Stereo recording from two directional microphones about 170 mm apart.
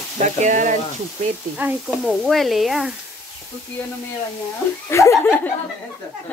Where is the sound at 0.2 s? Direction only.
45° right (ahead or behind).